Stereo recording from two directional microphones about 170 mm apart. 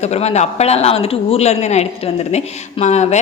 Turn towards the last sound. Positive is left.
turn(degrees=40)  # may be behind; listen again after turning